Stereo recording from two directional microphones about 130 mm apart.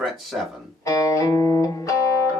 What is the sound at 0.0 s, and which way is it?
Speech, centre (ahead or behind).